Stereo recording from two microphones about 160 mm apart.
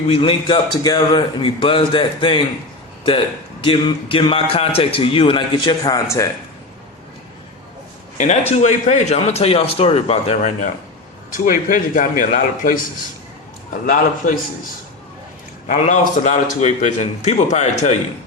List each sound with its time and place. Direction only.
0.1 s speech: 35° left (ahead or behind)
8.2 s speech: 45° left (ahead or behind)
11.3 s speech: 55° left (ahead or behind)
13.8 s speech: 55° left (ahead or behind)
15.6 s a man's voice: 50° left (ahead or behind)